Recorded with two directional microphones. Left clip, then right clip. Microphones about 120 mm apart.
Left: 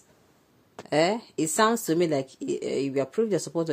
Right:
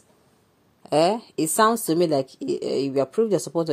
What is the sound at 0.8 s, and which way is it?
Speech, 20° right (ahead or behind).